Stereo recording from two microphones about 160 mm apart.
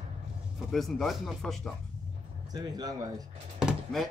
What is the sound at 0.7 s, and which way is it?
Speech, centre (ahead or behind).